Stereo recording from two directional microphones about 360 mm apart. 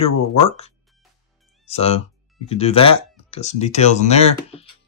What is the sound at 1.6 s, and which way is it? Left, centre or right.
Speech, centre.